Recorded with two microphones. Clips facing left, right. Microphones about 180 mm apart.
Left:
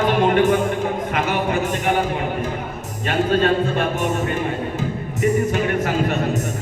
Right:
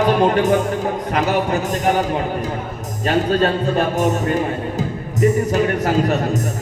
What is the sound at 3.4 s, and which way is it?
Speech, 40° right (ahead or behind).